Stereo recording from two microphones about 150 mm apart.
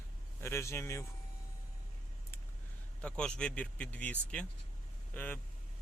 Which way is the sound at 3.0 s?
5° left (ahead or behind).